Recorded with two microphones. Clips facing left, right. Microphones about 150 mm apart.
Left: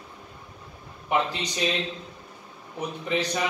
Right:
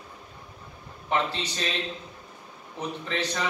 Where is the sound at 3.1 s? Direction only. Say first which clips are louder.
Left 5 dB; 15° left (ahead or behind).